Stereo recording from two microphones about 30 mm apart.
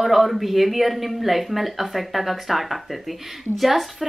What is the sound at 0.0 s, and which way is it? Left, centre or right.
A woman's voice, centre.